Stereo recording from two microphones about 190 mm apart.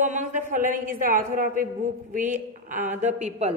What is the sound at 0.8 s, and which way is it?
A woman's voice, 45° right (ahead or behind).